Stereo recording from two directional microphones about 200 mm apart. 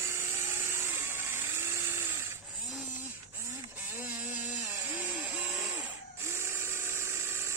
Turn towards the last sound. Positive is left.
turn(degrees=-15)  # may be behind; listen again after turning